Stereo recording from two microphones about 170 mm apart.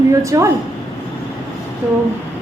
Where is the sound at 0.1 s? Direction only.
20° right (ahead or behind).